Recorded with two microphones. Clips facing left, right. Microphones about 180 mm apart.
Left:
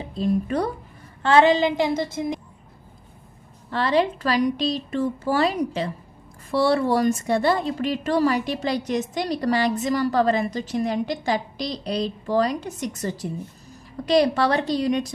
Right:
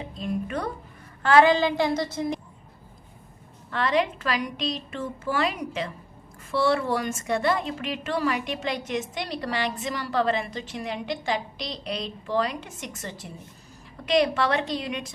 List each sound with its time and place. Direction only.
0.1 s a woman's voice: 35° left (ahead or behind)
1.2 s a woman's voice: 25° left (ahead or behind)
3.7 s a woman's voice: 30° left (ahead or behind)